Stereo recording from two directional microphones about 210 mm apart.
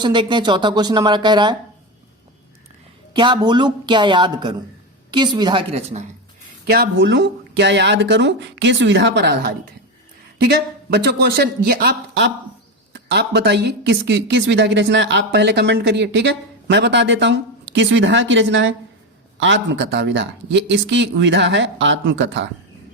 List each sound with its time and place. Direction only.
0.0 s a woman's voice: 20° right (ahead or behind)
3.1 s a woman's voice: 20° right (ahead or behind)
6.7 s a woman's voice: 50° right (ahead or behind)